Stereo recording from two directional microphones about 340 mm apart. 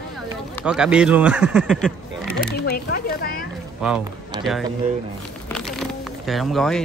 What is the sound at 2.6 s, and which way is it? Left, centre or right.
Speech, left.